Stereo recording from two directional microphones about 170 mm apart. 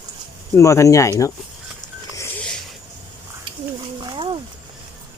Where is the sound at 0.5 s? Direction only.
15° left (ahead or behind).